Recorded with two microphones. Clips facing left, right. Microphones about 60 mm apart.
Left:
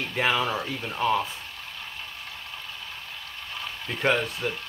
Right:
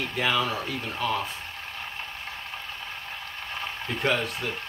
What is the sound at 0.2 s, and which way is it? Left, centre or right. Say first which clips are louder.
Speech: left 1 dB; centre.